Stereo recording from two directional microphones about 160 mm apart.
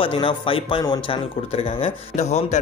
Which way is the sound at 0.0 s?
35° left (ahead or behind).